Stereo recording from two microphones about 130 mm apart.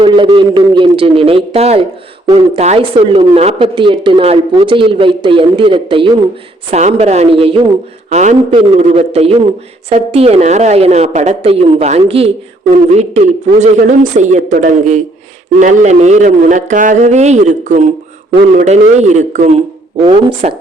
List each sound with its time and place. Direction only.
0.0 s a woman's voice: 40° right (ahead or behind)
6.7 s speech: 60° right (ahead or behind)
8.1 s a woman's voice: 60° right (ahead or behind)
12.7 s speech: 60° right (ahead or behind)
20.4 s speech: 60° right (ahead or behind)